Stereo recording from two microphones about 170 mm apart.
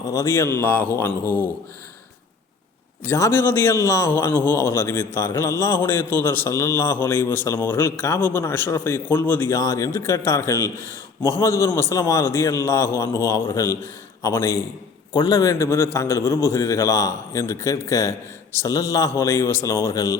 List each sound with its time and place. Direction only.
0.1 s a man's voice: 15° left (ahead or behind)
3.1 s a man's voice: 15° left (ahead or behind)